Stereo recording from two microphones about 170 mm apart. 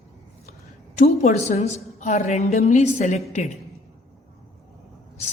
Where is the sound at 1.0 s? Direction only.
45° left (ahead or behind).